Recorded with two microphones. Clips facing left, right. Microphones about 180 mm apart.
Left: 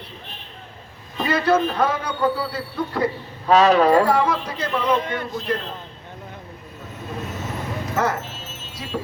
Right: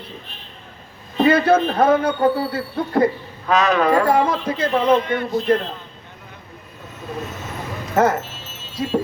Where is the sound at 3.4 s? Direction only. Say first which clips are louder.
Left 2 dB; 30° left (ahead or behind).